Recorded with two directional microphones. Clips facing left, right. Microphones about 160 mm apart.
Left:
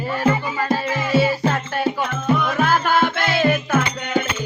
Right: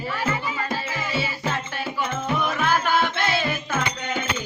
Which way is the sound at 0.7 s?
45° left (ahead or behind).